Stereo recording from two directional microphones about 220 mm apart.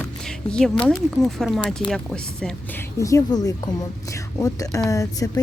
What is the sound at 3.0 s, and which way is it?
Speech, 15° left (ahead or behind).